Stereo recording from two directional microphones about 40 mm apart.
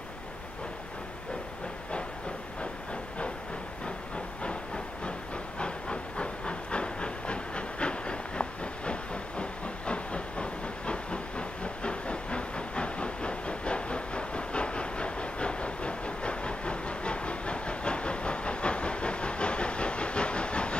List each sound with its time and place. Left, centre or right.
4.4 s train: left
5.6 s hiss: left